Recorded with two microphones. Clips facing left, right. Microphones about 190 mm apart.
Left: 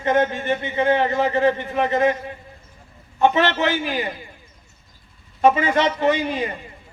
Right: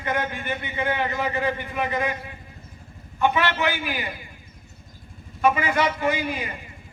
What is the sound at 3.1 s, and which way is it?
Speech, 25° left (ahead or behind).